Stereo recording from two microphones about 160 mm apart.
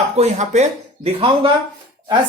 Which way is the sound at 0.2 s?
45° right (ahead or behind).